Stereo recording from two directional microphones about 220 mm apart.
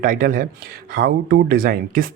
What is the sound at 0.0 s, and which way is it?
Speech, 40° right (ahead or behind).